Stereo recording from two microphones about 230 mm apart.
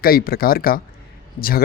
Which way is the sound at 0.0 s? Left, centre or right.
Left.